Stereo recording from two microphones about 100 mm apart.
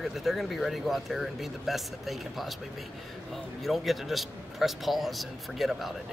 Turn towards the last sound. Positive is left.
turn(degrees=0)  # may be behind; listen again after turning